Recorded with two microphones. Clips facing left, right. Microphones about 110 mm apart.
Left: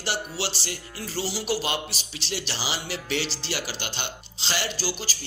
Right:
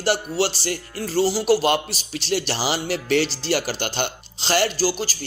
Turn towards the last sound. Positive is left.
turn(degrees=-45)  # may be behind; listen again after turning